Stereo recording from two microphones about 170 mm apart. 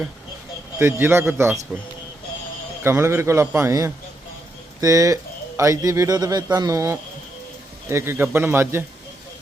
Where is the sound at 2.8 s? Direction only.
15° right (ahead or behind).